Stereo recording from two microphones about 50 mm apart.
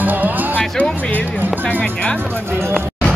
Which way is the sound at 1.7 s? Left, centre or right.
Left.